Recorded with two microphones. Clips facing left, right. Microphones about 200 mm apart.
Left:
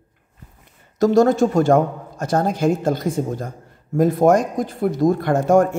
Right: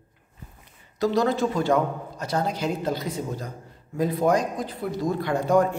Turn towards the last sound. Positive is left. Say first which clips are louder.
# left 5 dB
turn(degrees=50)  # may be behind; listen again after turning